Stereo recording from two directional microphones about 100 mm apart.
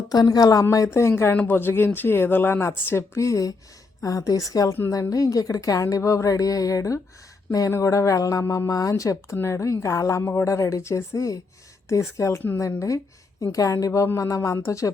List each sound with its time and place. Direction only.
0.1 s speech: 40° left (ahead or behind)